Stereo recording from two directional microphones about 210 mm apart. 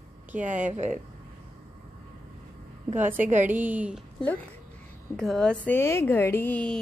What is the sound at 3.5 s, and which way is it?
Speech, 10° right (ahead or behind).